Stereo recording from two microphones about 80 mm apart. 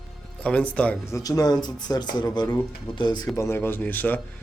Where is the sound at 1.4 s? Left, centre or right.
Left.